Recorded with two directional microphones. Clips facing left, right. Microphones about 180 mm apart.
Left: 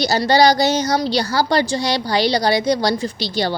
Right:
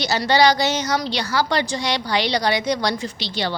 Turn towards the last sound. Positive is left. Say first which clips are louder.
# left 5 dB
turn(degrees=40)  # may be behind; listen again after turning